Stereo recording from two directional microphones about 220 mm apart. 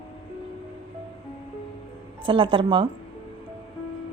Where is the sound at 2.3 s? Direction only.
25° right (ahead or behind).